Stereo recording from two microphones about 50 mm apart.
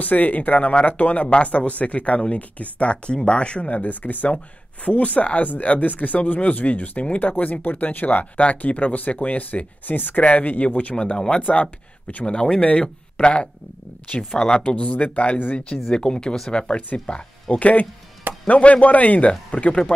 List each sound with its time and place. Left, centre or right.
0.0 s speech: left
15.9 s speech: centre